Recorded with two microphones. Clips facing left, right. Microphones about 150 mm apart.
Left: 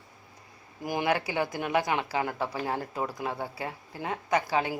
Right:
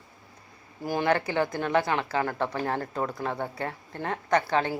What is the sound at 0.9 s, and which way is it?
A woman's voice, 15° left (ahead or behind).